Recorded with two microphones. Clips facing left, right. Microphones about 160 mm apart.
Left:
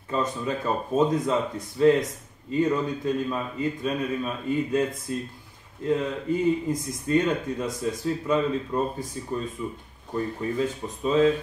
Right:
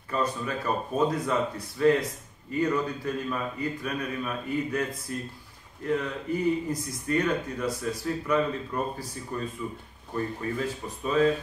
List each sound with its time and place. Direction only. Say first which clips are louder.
0.1 s speech: left 2 dB; 20° left (ahead or behind)